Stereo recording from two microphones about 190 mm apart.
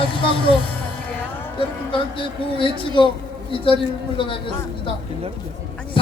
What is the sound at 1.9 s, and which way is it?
Speech, 25° left (ahead or behind).